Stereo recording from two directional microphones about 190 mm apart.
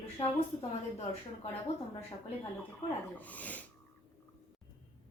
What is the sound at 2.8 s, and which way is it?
Speech, 35° left (ahead or behind).